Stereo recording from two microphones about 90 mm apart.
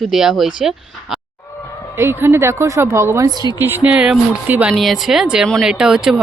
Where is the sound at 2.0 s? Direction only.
25° right (ahead or behind); by 3.5 s 45° right (ahead or behind).